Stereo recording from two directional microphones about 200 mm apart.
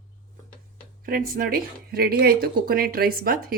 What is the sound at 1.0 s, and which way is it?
Speech, 45° right (ahead or behind).